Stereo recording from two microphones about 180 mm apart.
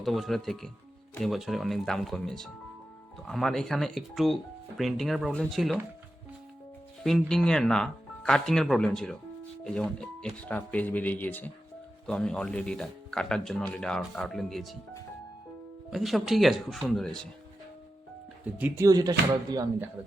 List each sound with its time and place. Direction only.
0.0 s speech: centre (ahead or behind)
7.0 s speech: centre (ahead or behind)
15.9 s speech: centre (ahead or behind)
18.5 s speech: 10° right (ahead or behind)